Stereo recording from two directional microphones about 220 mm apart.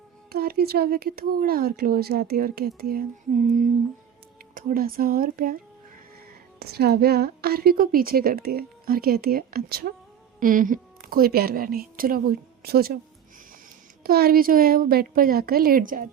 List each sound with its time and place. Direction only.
0.3 s a woman's voice: 45° right (ahead or behind)
4.5 s a woman's voice: 40° right (ahead or behind)
6.6 s a woman's voice: 45° right (ahead or behind)
14.0 s a woman's voice: 45° right (ahead or behind)